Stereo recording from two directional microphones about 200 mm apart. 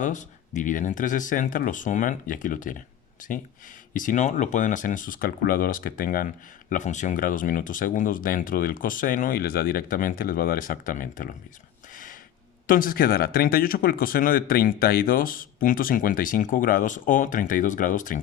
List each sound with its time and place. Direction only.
0.0 s speech: 40° left (ahead or behind)
12.6 s speech: 45° left (ahead or behind)